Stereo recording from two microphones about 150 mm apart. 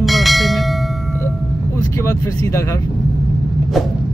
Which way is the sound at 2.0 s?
20° left (ahead or behind).